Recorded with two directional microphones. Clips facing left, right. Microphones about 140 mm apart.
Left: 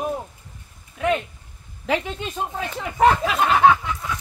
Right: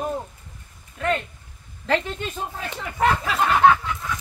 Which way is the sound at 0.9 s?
15° left (ahead or behind).